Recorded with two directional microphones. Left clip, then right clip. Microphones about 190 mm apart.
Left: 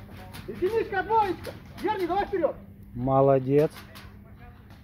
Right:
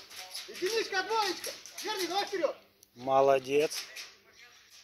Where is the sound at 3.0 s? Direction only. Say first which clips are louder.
Left 4 dB; centre (ahead or behind).